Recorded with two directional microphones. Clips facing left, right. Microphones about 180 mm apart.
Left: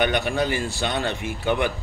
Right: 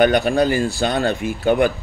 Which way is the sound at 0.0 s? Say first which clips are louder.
Right 7 dB; 40° right (ahead or behind).